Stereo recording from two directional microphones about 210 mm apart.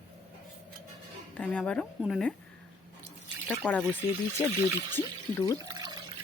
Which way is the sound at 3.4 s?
5° left (ahead or behind).